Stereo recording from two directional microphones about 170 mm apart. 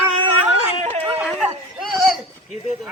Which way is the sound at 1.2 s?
5° right (ahead or behind).